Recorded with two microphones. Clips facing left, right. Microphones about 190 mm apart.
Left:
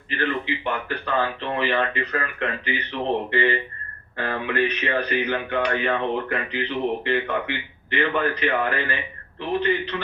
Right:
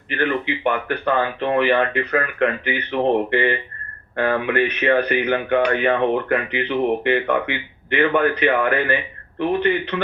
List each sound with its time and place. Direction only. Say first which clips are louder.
0.2 s speech: right 5 dB; 60° right (ahead or behind)